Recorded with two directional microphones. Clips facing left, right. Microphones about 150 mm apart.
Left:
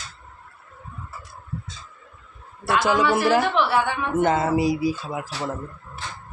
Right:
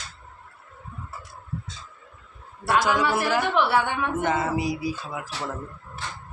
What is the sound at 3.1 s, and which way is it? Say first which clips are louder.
Speech: left 4 dB; 90° left.